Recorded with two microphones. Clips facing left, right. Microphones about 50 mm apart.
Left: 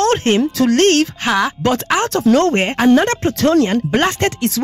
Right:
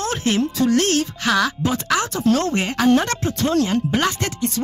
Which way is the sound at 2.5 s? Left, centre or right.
Left.